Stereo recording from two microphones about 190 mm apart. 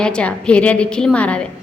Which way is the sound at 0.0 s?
5° left (ahead or behind).